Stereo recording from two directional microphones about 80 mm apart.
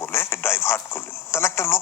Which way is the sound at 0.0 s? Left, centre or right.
Left.